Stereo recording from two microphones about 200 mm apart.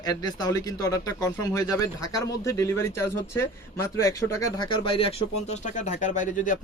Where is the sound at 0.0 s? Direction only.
20° left (ahead or behind).